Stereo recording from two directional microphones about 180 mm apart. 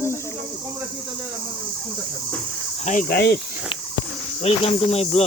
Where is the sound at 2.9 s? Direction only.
50° left (ahead or behind).